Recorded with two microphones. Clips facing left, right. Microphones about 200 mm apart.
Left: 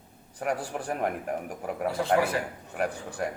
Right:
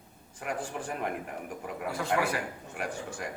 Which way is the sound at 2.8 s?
35° left (ahead or behind).